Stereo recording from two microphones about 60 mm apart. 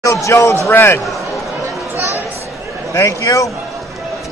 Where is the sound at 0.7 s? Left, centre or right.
Left.